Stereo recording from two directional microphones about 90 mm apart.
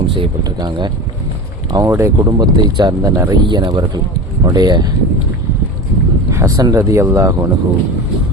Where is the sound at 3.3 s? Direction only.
55° right (ahead or behind).